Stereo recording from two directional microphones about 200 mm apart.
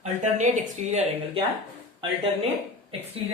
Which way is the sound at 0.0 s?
35° right (ahead or behind).